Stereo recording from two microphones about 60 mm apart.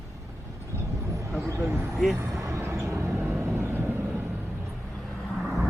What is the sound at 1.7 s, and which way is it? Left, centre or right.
Speech, right.